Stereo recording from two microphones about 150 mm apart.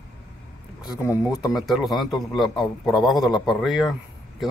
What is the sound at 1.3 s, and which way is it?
A man's voice, centre (ahead or behind).